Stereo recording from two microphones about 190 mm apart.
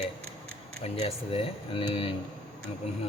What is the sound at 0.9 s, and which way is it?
Speech, 30° left (ahead or behind).